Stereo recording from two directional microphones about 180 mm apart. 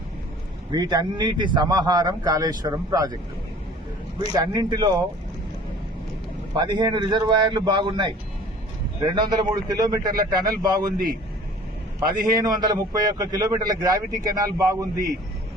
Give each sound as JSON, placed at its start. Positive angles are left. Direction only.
{"t": 0.7, "sound": "a man's voice", "side_deg": -20}
{"t": 4.2, "sound": "a man's voice", "side_deg": -20}
{"t": 6.5, "sound": "a man's voice", "side_deg": -25}
{"t": 9.1, "sound": "a man's voice", "side_deg": -25}
{"t": 10.9, "sound": "a man's voice", "side_deg": -55}
{"t": 11.9, "sound": "a man's voice", "side_deg": -20}